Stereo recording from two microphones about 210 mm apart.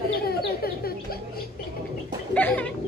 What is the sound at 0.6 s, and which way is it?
Bird, 45° left (ahead or behind).